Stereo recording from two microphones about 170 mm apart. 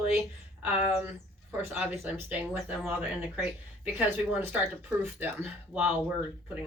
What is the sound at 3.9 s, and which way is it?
A woman's voice, 10° right (ahead or behind).